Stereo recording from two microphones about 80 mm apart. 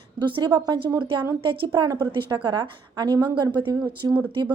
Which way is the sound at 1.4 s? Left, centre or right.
Right.